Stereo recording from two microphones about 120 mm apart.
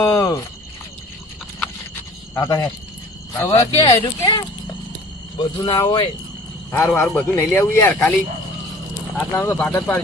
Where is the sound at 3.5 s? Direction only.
50° left (ahead or behind).